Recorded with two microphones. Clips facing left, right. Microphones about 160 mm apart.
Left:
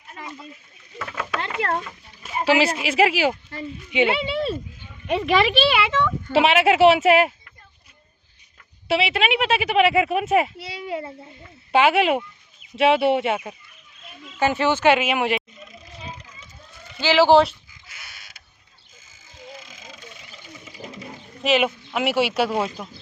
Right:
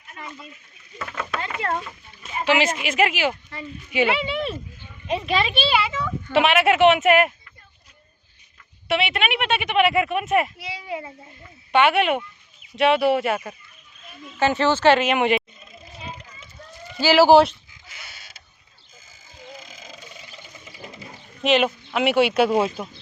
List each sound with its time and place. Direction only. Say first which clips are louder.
0.9 s speech: left 1 dB; centre (ahead or behind)
2.3 s speech: left 2 dB; 35° left (ahead or behind)
3.9 s speech: left 1 dB; 25° left (ahead or behind)
5.0 s speech: left 4 dB; 60° left (ahead or behind); by 6.1 s 80° left
6.3 s speech: left 1 dB; 30° left (ahead or behind)
8.9 s speech: left 2 dB; 30° left (ahead or behind)
11.7 s speech: left 1 dB; 30° left (ahead or behind); by 15.4 s centre (ahead or behind)
17.0 s speech: right 2 dB; 10° right (ahead or behind)
21.4 s speech: right 1 dB; 5° left (ahead or behind)